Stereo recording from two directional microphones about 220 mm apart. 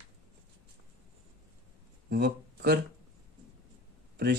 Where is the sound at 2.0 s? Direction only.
45° right (ahead or behind).